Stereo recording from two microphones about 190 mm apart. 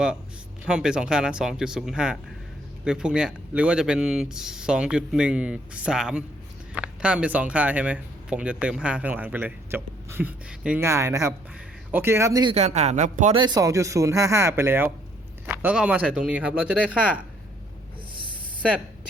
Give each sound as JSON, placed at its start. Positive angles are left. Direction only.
{"t": 0.6, "sound": "speech", "side_deg": -5}
{"t": 12.5, "sound": "speech", "side_deg": -35}
{"t": 13.3, "sound": "speech", "side_deg": -25}
{"t": 18.1, "sound": "a sound", "side_deg": -25}